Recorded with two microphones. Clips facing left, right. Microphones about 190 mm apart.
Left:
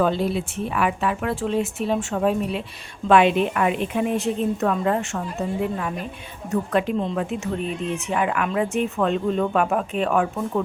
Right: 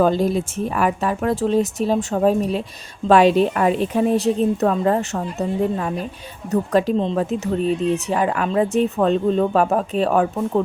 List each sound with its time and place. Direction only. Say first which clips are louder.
0.0 s speech: right 4 dB; 40° right (ahead or behind)